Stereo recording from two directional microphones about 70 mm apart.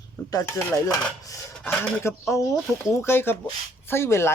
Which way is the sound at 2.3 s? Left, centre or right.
Left.